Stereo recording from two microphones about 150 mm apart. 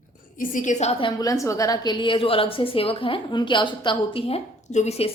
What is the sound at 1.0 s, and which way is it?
A woman's voice, 25° left (ahead or behind).